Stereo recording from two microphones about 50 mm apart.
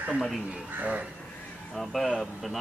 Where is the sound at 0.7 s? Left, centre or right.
Right.